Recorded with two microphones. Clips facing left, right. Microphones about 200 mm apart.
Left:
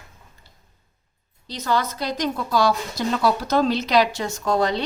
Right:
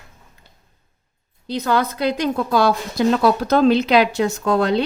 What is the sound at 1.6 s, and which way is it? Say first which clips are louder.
A woman's voice: right 4 dB; 55° right (ahead or behind).